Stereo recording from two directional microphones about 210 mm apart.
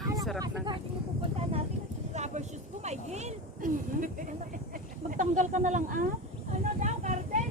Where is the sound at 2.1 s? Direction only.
35° right (ahead or behind).